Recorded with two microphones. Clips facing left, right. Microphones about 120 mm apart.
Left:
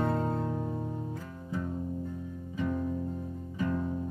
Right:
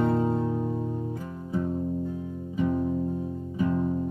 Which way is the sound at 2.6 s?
20° right (ahead or behind).